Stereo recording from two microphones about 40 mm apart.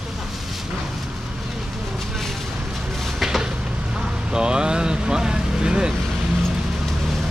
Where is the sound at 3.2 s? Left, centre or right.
Centre.